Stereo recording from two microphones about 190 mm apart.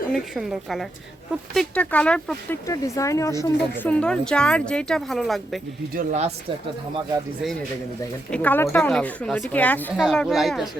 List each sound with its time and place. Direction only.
0.1 s a woman's voice: centre (ahead or behind)
2.6 s speech: 15° left (ahead or behind); by 5.5 s centre (ahead or behind)
5.9 s speech: 45° right (ahead or behind)
8.3 s a woman's voice: 5° left (ahead or behind)